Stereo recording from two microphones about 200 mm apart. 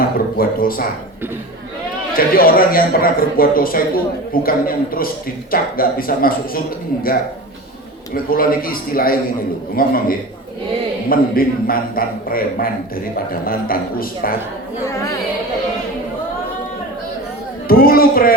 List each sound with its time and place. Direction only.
0.3 s speech: 45° left (ahead or behind)
2.1 s speech: 45° left (ahead or behind)
8.1 s speech: 45° left (ahead or behind)
14.8 s a woman's voice: 15° left (ahead or behind)
17.7 s speech: 45° left (ahead or behind)